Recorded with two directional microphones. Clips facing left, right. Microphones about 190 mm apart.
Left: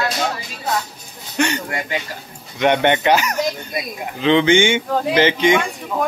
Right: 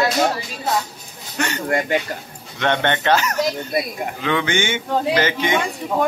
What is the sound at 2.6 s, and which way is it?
A man's voice, 15° left (ahead or behind).